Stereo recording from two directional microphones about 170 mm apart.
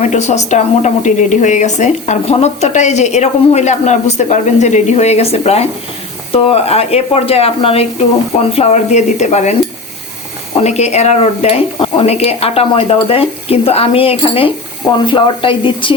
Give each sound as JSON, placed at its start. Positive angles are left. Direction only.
{"t": 0.0, "sound": "a woman's voice", "side_deg": 45}